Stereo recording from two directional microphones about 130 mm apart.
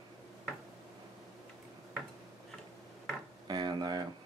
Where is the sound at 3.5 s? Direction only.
35° right (ahead or behind).